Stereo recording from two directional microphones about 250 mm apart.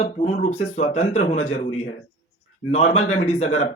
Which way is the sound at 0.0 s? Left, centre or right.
Left.